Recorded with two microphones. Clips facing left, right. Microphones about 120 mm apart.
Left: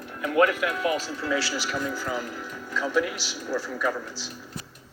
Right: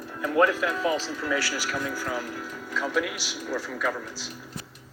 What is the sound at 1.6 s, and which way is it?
Speech, 5° left (ahead or behind).